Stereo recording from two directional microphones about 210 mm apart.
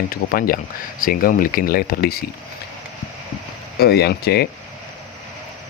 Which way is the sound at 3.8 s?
50° left (ahead or behind).